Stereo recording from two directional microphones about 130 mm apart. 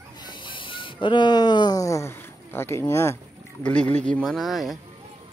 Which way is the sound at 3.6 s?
10° left (ahead or behind).